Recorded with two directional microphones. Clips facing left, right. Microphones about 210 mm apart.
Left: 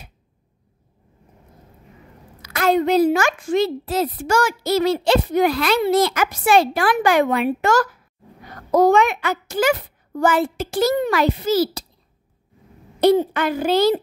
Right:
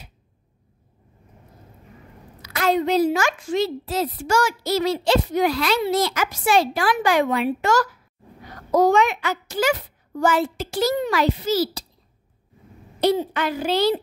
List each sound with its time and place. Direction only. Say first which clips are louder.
2.4 s a woman's voice: left 3 dB; 50° left (ahead or behind)
13.0 s a child's voice: left 5 dB; 50° left (ahead or behind)